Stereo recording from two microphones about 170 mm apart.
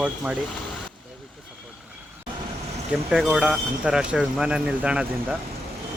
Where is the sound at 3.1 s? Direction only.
5° right (ahead or behind).